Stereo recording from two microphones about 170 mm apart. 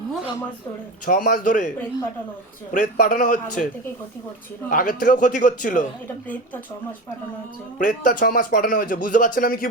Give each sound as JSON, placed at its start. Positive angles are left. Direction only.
{"t": 1.0, "sound": "speech", "side_deg": 50}
{"t": 2.7, "sound": "speech", "side_deg": 50}
{"t": 4.7, "sound": "speech", "side_deg": 50}
{"t": 6.2, "sound": "speech", "side_deg": 10}
{"t": 7.8, "sound": "speech", "side_deg": 50}